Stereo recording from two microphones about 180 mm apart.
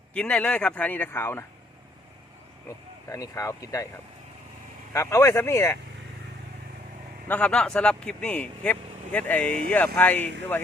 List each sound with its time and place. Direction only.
0.1 s speech: 5° left (ahead or behind)
3.1 s speech: 15° left (ahead or behind)
4.9 s speech: 15° left (ahead or behind)
7.3 s speech: 5° left (ahead or behind)